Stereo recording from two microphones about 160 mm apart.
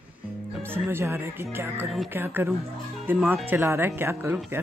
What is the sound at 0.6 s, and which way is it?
Speech, 15° right (ahead or behind).